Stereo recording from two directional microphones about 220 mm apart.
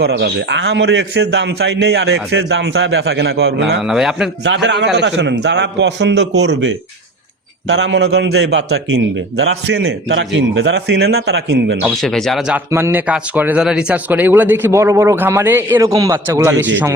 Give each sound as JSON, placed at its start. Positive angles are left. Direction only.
{"t": 0.0, "sound": "a man's voice", "side_deg": -50}
{"t": 3.8, "sound": "a man's voice", "side_deg": 0}
{"t": 4.4, "sound": "a man's voice", "side_deg": -55}
{"t": 12.0, "sound": "speech", "side_deg": 0}